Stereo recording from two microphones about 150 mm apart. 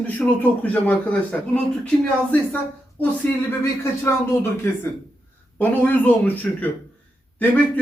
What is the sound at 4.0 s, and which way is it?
A man's voice, 15° left (ahead or behind).